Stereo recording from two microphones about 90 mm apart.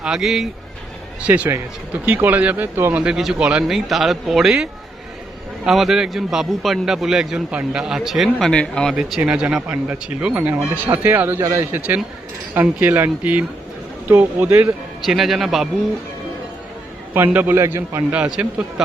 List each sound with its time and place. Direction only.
0.0 s a man's voice: 5° right (ahead or behind)
1.2 s speech: 15° right (ahead or behind)
3.0 s a man's voice: 5° right (ahead or behind)
9.0 s speech: 10° right (ahead or behind)
10.8 s a man's voice: 25° right (ahead or behind)
12.8 s speech: 25° right (ahead or behind)
15.0 s a man's voice: centre (ahead or behind)
17.2 s speech: 20° right (ahead or behind)
17.6 s a man's voice: 35° right (ahead or behind)
18.1 s speech: 10° right (ahead or behind)